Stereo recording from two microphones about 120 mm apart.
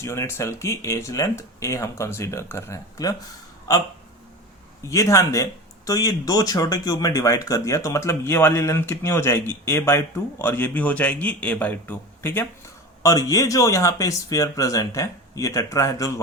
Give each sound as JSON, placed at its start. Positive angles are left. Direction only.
{"t": 0.0, "sound": "speech", "side_deg": 25}
{"t": 13.0, "sound": "speech", "side_deg": 30}